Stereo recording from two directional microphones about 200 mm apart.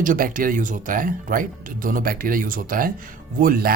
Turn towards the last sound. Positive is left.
turn(degrees=-45)  # may be behind; listen again after turning